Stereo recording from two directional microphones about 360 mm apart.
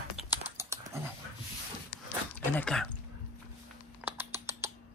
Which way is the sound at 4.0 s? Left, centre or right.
Centre.